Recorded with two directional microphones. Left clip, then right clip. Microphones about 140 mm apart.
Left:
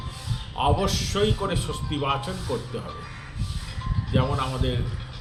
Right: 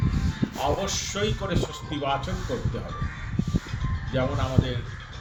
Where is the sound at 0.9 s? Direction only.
15° left (ahead or behind).